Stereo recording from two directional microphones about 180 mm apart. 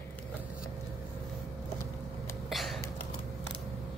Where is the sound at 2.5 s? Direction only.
Centre (ahead or behind).